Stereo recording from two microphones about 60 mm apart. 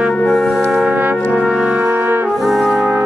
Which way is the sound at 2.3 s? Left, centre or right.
Centre.